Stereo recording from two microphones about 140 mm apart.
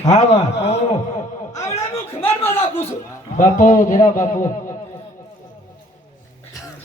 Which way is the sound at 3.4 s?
60° left (ahead or behind).